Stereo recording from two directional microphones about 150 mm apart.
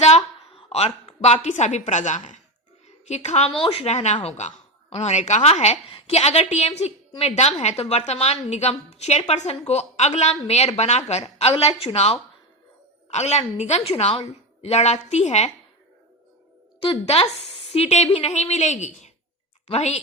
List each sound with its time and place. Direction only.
0.0 s a sound: 45° left (ahead or behind)
3.1 s a woman's voice: 45° left (ahead or behind)
16.8 s a woman's voice: 40° left (ahead or behind)